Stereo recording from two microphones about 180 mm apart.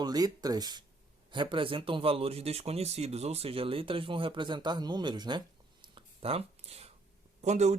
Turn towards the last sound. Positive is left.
turn(degrees=-40)  # may be behind; listen again after turning